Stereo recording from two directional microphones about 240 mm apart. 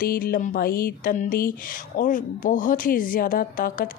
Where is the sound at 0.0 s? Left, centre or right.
Left.